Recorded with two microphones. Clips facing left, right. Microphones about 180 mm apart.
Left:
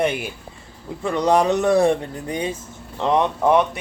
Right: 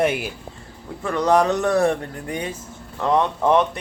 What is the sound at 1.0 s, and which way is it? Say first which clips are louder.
Speech: even; 15° left (ahead or behind).